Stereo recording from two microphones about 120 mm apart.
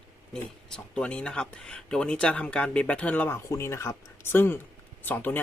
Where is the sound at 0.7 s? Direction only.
10° left (ahead or behind).